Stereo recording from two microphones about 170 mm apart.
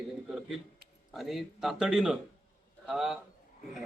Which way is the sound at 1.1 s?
Centre (ahead or behind).